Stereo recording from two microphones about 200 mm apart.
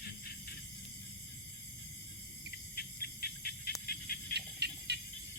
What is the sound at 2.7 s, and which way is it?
Insect, 50° left (ahead or behind).